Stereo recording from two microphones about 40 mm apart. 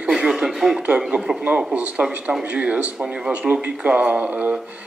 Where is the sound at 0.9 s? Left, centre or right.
Centre.